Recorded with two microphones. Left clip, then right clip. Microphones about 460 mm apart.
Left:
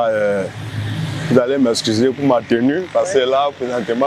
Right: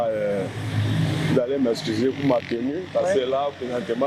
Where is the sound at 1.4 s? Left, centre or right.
Left.